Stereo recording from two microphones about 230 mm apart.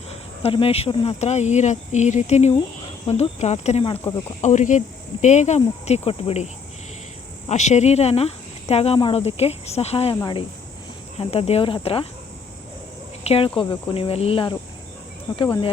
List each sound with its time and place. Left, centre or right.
0.4 s speech: left
13.2 s cricket: left
13.6 s speech: left